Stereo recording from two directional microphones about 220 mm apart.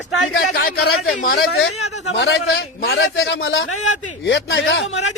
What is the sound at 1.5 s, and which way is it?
A man's voice, 60° left (ahead or behind).